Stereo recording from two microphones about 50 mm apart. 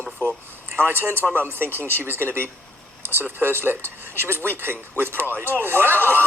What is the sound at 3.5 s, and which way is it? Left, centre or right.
Speech, right.